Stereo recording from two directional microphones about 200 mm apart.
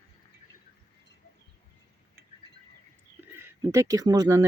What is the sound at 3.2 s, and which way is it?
Speech, 15° right (ahead or behind).